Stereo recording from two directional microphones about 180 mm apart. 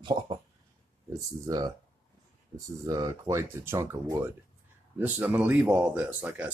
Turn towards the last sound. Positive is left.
turn(degrees=-5)  # may be behind; listen again after turning